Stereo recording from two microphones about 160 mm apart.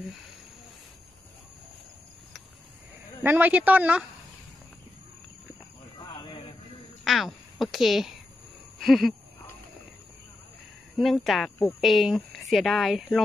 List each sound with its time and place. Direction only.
3.3 s speech: 10° right (ahead or behind)
6.1 s music: 35° left (ahead or behind)
7.1 s speech: centre (ahead or behind)
8.7 s a sound: centre (ahead or behind)
11.0 s speech: centre (ahead or behind)